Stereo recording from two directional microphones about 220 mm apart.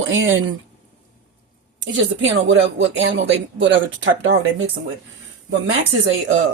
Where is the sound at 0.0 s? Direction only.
60° right (ahead or behind).